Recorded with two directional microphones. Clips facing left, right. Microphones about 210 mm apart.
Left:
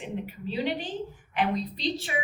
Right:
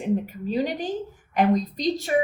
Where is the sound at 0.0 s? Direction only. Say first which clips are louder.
Right 9 dB; 45° right (ahead or behind).